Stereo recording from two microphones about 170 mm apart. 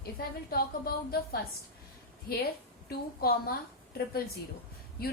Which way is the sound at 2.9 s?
60° left (ahead or behind).